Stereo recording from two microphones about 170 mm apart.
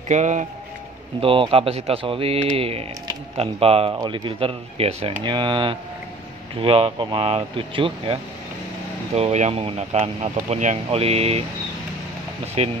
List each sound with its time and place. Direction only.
0.1 s a man's voice: 45° right (ahead or behind)
1.2 s speech: 30° right (ahead or behind)
12.6 s speech: 35° right (ahead or behind)